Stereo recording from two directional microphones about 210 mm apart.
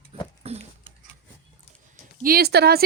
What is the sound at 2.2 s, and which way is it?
Speech, 45° right (ahead or behind).